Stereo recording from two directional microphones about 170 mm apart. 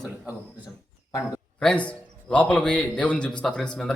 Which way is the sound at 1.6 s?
5° left (ahead or behind).